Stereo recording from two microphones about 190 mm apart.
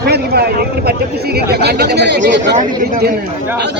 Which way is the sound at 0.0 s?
55° right (ahead or behind).